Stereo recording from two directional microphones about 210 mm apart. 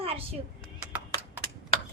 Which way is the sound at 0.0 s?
25° right (ahead or behind).